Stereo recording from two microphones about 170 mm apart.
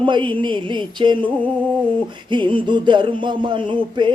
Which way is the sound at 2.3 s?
30° right (ahead or behind).